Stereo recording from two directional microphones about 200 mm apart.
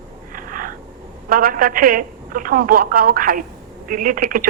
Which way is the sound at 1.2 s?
45° right (ahead or behind).